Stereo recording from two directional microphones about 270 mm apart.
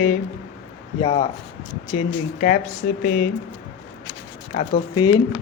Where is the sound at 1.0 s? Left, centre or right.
Left.